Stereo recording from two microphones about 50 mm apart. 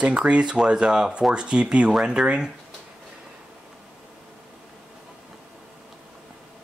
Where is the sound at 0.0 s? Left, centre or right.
Right.